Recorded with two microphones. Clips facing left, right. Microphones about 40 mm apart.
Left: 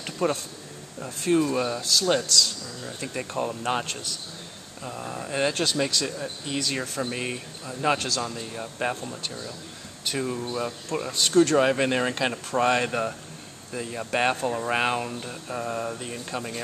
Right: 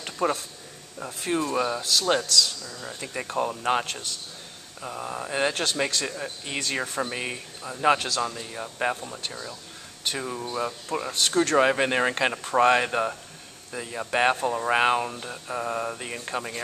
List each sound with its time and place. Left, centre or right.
0.0 s speech: centre
10.0 s speech: centre
11.5 s speech: centre